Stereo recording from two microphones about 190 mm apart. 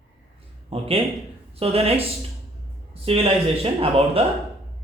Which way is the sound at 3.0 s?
30° right (ahead or behind).